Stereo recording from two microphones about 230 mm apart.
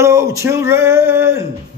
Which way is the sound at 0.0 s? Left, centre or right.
Centre.